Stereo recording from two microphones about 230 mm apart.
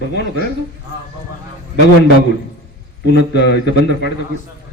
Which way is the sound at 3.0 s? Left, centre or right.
Left.